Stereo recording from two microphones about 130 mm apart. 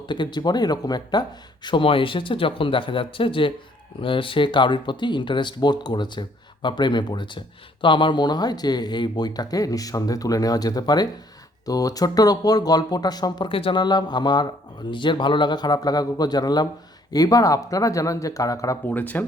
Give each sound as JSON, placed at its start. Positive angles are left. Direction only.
{"t": 0.0, "sound": "speech", "side_deg": 35}
{"t": 18.9, "sound": "speech", "side_deg": 15}